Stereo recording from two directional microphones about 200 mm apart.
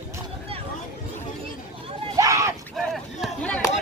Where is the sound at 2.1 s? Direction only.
15° right (ahead or behind).